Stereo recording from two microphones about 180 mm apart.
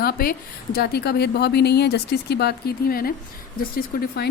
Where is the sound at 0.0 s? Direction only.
55° left (ahead or behind).